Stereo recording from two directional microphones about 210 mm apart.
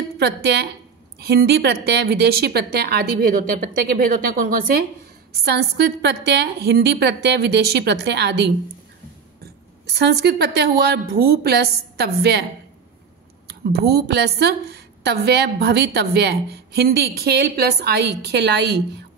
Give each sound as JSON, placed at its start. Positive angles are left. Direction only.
{"t": 0.2, "sound": "a woman's voice", "side_deg": -50}
{"t": 13.5, "sound": "a woman's voice", "side_deg": -50}